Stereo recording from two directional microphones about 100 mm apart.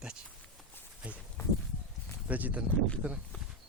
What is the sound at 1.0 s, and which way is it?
Livestock, 10° right (ahead or behind).